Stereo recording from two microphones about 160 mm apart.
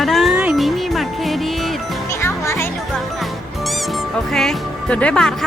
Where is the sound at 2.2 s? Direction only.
15° left (ahead or behind).